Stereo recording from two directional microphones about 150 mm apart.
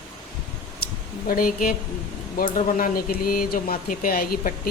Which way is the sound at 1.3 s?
70° left (ahead or behind).